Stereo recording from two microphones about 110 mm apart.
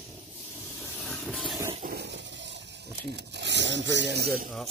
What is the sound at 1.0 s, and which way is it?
Vehicle, 5° left (ahead or behind).